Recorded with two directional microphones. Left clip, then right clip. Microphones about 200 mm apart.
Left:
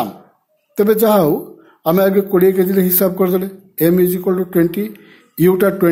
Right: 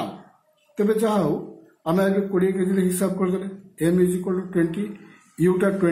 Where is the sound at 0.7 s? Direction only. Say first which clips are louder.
Left 9 dB; 50° left (ahead or behind).